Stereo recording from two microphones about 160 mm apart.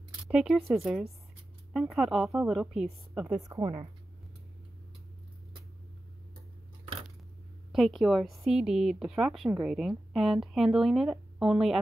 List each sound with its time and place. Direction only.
0.3 s speech: 5° right (ahead or behind)
3.4 s speech: 20° right (ahead or behind)
7.7 s speech: centre (ahead or behind)